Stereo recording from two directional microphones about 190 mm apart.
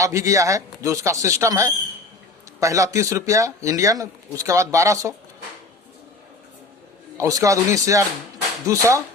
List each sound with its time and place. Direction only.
0.0 s speech: 15° right (ahead or behind)
7.2 s speech: 15° right (ahead or behind)